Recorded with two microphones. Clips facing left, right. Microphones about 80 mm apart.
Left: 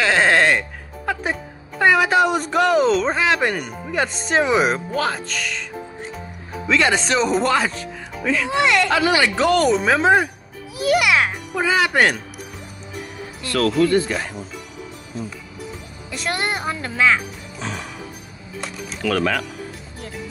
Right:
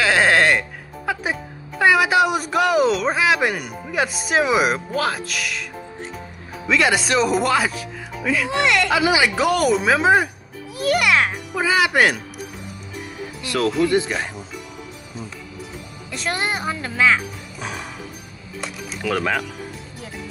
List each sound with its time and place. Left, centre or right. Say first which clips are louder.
0.0 s speech: even; centre
9.0 s a woman's voice: even; centre
13.4 s speech: left 2 dB; centre
16.1 s a woman's voice: even; centre
17.6 s speech: left 1 dB; centre
19.0 s speech: left 1 dB; centre